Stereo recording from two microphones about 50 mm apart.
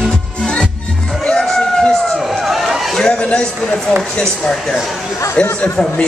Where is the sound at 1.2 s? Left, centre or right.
Centre.